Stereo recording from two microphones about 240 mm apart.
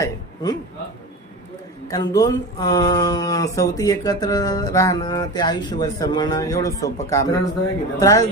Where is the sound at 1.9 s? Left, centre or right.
Centre.